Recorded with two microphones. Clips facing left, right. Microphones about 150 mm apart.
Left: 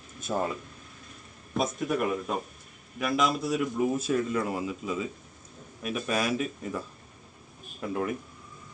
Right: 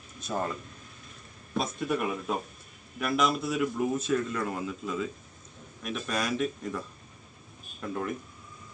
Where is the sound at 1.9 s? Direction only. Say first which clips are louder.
Left 1 dB; centre (ahead or behind).